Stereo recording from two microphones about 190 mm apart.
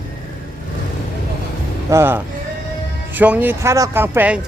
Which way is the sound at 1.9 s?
15° right (ahead or behind).